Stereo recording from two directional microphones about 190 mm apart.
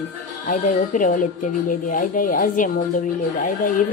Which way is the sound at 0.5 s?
45° left (ahead or behind).